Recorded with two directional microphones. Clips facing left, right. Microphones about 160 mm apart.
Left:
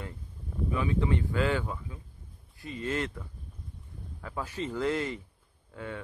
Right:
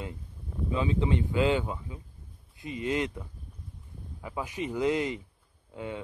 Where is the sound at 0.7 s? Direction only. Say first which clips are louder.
Right 1 dB; 20° right (ahead or behind).